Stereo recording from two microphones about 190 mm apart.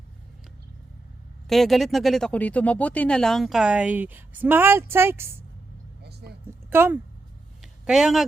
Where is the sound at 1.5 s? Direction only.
Centre (ahead or behind).